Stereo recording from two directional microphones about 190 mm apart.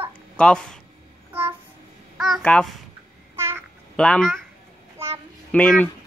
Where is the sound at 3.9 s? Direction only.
5° left (ahead or behind).